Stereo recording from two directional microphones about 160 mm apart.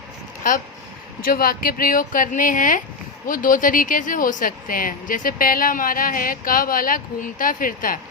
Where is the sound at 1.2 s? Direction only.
65° left (ahead or behind).